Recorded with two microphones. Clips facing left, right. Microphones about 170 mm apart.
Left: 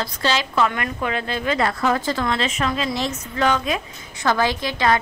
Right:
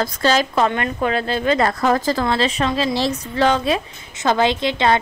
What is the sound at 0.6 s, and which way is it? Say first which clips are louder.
A woman's voice: right 3 dB; 30° right (ahead or behind).